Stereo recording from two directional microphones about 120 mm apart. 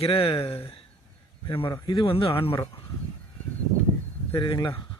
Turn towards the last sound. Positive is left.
turn(degrees=40)  # may be behind; listen again after turning